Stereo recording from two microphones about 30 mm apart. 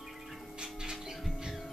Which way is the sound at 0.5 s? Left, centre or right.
Right.